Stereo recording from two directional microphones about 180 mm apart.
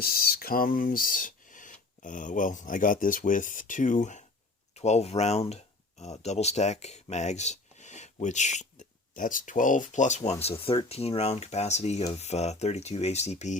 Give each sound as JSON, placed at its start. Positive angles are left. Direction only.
{"t": 0.0, "sound": "speech", "side_deg": 55}